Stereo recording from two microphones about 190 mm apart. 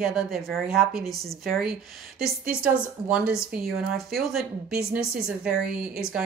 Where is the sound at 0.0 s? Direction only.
Centre (ahead or behind).